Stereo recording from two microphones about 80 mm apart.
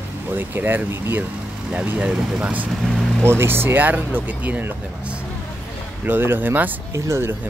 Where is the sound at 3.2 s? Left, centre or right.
Right.